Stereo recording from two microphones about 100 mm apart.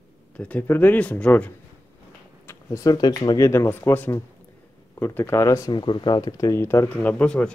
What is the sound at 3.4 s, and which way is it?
Speech, 25° left (ahead or behind).